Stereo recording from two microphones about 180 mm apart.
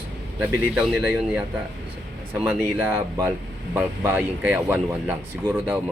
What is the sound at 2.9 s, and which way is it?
Speech, 15° right (ahead or behind).